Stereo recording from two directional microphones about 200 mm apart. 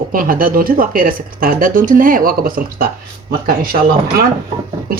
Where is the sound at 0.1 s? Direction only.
45° right (ahead or behind).